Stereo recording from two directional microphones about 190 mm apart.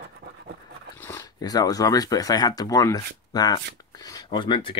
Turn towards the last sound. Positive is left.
turn(degrees=25)  # may be behind; listen again after turning